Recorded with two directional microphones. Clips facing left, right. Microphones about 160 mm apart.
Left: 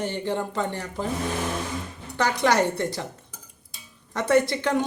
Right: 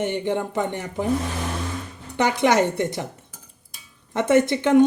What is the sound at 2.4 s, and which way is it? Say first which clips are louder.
Speech: right 2 dB; 20° right (ahead or behind).